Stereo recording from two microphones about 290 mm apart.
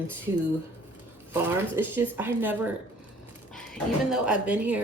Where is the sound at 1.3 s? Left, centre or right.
Centre.